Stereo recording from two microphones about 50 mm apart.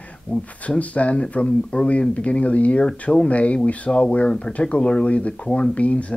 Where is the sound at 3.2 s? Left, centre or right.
Left.